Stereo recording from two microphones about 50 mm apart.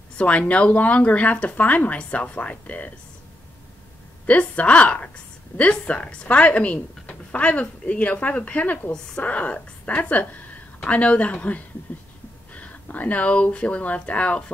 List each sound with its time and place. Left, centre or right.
0.2 s a woman's voice: left
4.3 s a woman's voice: left